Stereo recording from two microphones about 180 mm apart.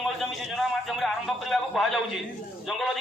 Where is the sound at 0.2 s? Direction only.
Centre (ahead or behind).